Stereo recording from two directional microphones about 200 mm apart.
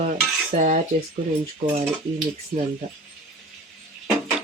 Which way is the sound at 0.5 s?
40° right (ahead or behind).